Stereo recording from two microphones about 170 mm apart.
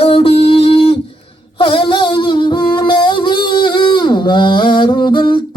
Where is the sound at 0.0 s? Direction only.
35° left (ahead or behind).